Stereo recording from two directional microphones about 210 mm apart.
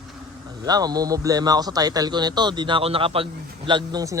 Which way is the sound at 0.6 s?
20° right (ahead or behind).